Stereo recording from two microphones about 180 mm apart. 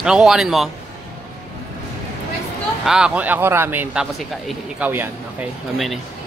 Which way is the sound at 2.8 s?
5° right (ahead or behind).